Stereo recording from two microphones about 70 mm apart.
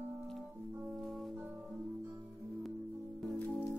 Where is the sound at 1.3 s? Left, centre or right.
Right.